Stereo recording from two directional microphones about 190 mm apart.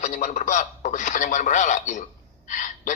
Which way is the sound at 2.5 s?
40° left (ahead or behind).